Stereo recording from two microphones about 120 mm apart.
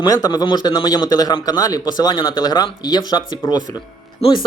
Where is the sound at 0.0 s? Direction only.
35° left (ahead or behind).